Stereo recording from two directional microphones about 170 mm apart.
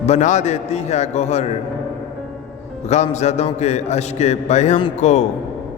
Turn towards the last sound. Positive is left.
turn(degrees=45)  # may be behind; listen again after turning